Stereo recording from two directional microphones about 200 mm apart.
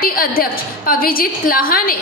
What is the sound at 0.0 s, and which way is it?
A woman's voice, 45° left (ahead or behind).